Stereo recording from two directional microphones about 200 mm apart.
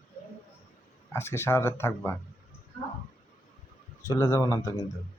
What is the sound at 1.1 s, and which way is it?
Speech, 10° left (ahead or behind).